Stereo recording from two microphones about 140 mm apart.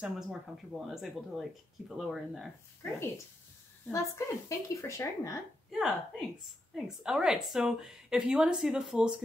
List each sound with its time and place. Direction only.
0.0 s a woman's voice: 5° right (ahead or behind)
2.8 s a woman's voice: 20° left (ahead or behind)
5.7 s a woman's voice: centre (ahead or behind)